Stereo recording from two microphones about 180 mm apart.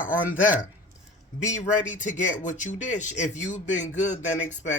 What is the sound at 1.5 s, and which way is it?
Speech, 45° left (ahead or behind).